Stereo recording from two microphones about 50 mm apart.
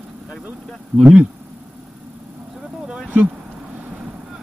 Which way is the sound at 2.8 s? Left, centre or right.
Centre.